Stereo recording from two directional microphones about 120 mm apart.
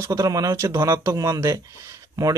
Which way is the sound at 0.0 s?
25° right (ahead or behind).